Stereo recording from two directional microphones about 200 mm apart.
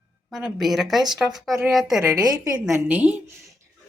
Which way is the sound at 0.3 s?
Centre (ahead or behind).